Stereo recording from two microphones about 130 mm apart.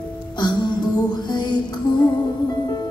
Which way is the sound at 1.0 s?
35° left (ahead or behind).